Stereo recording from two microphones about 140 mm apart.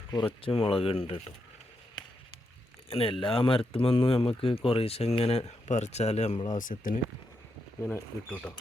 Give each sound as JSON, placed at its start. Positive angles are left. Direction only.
{"t": 0.3, "sound": "speech", "side_deg": 40}
{"t": 2.9, "sound": "speech", "side_deg": 40}
{"t": 6.5, "sound": "speech", "side_deg": 70}
{"t": 7.9, "sound": "speech", "side_deg": 10}